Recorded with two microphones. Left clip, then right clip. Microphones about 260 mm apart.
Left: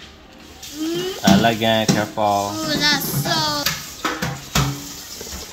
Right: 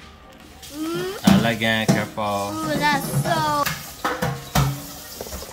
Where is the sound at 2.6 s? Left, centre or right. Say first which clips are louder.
Even; centre.